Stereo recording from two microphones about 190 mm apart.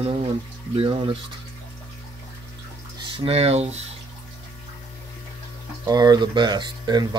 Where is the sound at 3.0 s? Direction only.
30° right (ahead or behind).